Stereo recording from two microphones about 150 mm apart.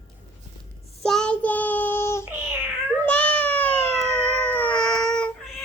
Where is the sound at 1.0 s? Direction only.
5° left (ahead or behind).